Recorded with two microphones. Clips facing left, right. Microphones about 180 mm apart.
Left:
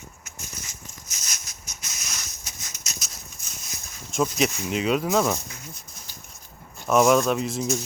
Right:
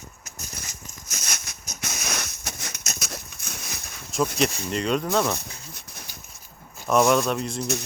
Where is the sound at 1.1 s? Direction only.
65° right (ahead or behind).